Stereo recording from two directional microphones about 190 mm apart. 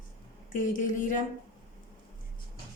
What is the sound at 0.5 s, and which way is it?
Speech, 40° left (ahead or behind).